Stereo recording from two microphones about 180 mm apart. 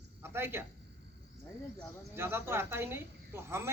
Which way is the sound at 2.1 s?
10° right (ahead or behind).